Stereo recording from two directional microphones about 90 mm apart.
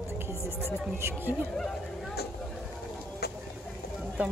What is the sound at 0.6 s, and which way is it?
Speech, 25° right (ahead or behind).